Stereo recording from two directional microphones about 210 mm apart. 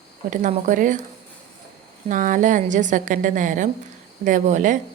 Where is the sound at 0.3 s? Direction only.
35° right (ahead or behind).